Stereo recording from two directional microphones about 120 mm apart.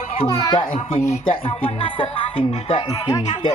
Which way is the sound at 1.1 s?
50° left (ahead or behind).